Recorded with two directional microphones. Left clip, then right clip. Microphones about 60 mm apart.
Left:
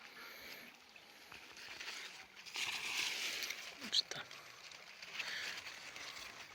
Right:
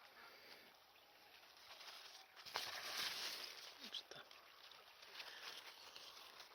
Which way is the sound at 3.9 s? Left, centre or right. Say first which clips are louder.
Left 17 dB; left.